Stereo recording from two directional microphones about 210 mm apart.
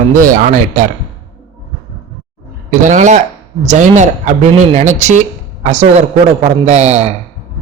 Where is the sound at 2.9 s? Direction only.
35° right (ahead or behind).